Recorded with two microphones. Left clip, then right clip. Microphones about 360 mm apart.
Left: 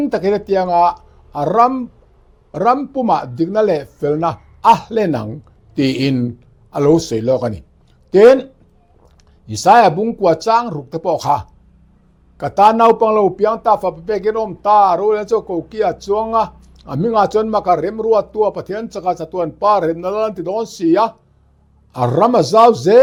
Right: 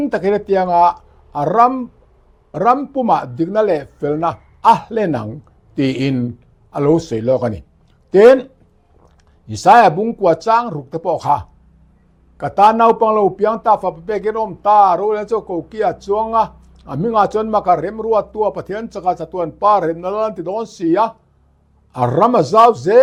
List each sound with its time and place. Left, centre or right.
0.0 s a man's voice: left
9.5 s a man's voice: left